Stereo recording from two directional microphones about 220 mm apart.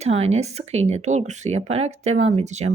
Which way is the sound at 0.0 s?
30° right (ahead or behind).